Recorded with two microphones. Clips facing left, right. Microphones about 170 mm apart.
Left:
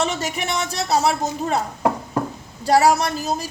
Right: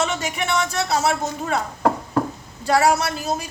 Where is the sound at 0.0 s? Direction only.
35° left (ahead or behind).